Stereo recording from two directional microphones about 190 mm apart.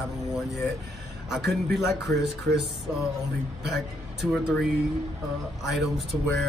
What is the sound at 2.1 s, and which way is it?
Speech, 65° right (ahead or behind).